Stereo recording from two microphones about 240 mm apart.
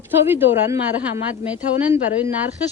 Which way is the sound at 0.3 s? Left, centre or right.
Centre.